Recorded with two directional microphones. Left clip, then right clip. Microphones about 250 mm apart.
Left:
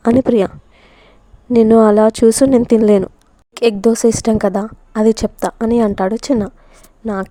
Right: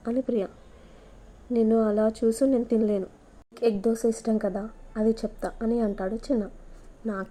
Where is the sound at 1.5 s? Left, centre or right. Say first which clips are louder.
Left 14 dB; left.